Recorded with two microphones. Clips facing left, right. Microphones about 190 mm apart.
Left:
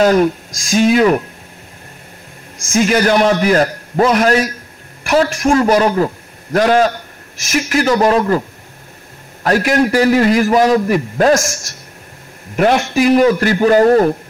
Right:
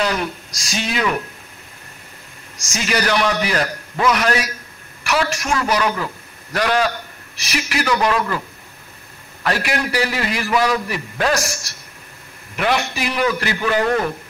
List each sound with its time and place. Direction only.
0.0 s a man's voice: 45° left (ahead or behind)
2.5 s a man's voice: 55° left (ahead or behind)